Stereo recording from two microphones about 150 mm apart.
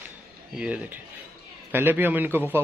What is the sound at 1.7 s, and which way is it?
Speech, 15° right (ahead or behind).